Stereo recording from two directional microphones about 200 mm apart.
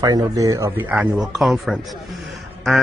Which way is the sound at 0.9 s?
5° right (ahead or behind).